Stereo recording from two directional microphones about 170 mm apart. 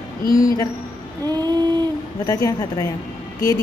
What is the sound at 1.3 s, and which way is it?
Female singing, 25° right (ahead or behind).